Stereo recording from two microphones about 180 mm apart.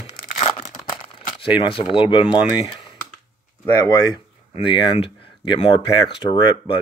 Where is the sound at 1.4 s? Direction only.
30° left (ahead or behind).